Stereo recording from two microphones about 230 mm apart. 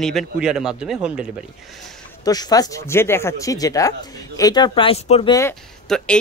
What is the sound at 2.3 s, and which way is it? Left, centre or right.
Speech, centre.